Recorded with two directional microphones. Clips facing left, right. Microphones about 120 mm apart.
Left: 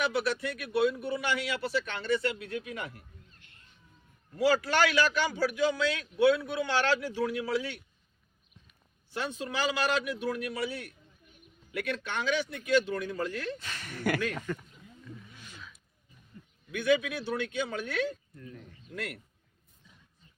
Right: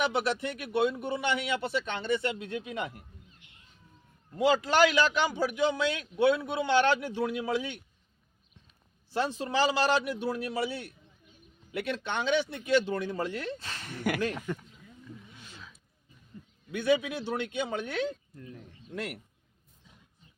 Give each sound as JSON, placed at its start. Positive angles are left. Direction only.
{"t": 0.0, "sound": "a man's voice", "side_deg": -25}
{"t": 9.1, "sound": "a man's voice", "side_deg": -30}
{"t": 15.0, "sound": "roaring cats", "side_deg": -25}
{"t": 16.7, "sound": "a man's voice", "side_deg": -25}